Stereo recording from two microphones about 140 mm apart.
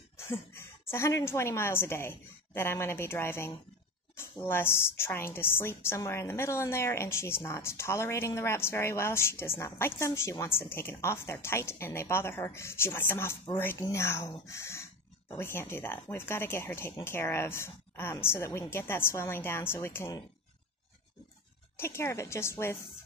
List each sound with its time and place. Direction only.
0.3 s speech: 15° left (ahead or behind)
21.7 s a woman's voice: 15° left (ahead or behind)